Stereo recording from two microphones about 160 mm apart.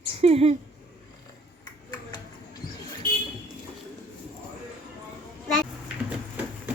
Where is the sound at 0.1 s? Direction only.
40° right (ahead or behind).